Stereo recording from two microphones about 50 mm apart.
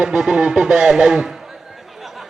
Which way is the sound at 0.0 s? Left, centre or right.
Centre.